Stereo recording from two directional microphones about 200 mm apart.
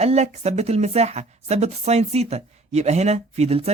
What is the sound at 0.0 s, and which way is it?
Speech, 30° right (ahead or behind).